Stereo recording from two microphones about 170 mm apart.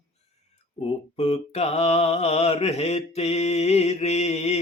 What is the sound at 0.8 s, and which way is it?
Mantra, 35° left (ahead or behind).